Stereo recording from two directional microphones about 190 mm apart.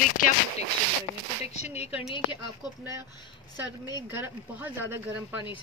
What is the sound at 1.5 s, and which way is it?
Speech, 35° left (ahead or behind).